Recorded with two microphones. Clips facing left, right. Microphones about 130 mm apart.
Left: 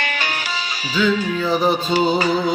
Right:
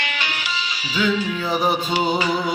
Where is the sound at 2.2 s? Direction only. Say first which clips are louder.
Left 3 dB; 40° left (ahead or behind).